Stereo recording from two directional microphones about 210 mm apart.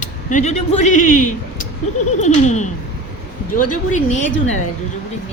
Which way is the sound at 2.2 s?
35° left (ahead or behind).